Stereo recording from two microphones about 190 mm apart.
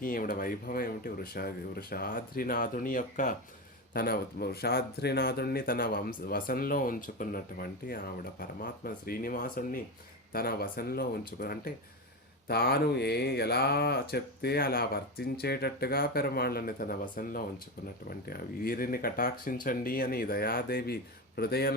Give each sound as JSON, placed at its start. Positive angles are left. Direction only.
{"t": 0.0, "sound": "speech", "side_deg": 50}